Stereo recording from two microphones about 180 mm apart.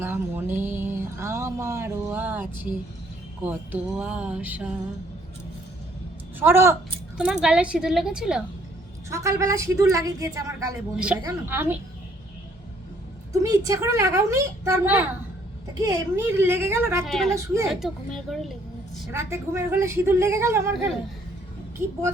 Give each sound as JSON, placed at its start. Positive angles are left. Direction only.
{"t": 0.0, "sound": "a sound", "side_deg": -10}
{"t": 3.4, "sound": "a woman's voice", "side_deg": -10}
{"t": 6.4, "sound": "a woman's voice", "side_deg": -15}
{"t": 9.0, "sound": "a woman's voice", "side_deg": -15}
{"t": 10.9, "sound": "a woman's voice", "side_deg": -5}
{"t": 13.4, "sound": "a woman's voice", "side_deg": -20}
{"t": 17.1, "sound": "a woman's voice", "side_deg": 0}
{"t": 17.3, "sound": "a woman's voice", "side_deg": -15}
{"t": 17.7, "sound": "a woman's voice", "side_deg": 0}
{"t": 19.1, "sound": "a woman's voice", "side_deg": -15}